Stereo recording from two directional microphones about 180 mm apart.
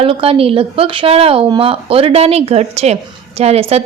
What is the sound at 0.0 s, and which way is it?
Speech, 30° right (ahead or behind).